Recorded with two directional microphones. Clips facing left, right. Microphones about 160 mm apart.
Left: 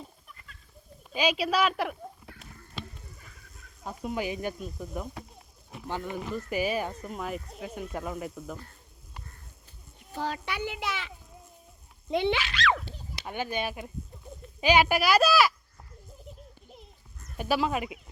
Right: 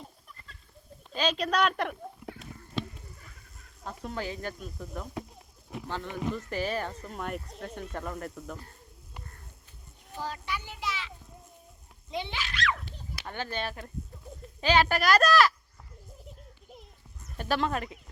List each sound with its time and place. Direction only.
1.1 s a woman's voice: 10° left (ahead or behind)
3.8 s speech: 10° left (ahead or behind)
10.2 s a child's voice: 75° left (ahead or behind)
12.1 s a child's voice: 65° left (ahead or behind); by 12.7 s 80° left
13.2 s speech: 15° left (ahead or behind)
17.3 s speech: 10° left (ahead or behind)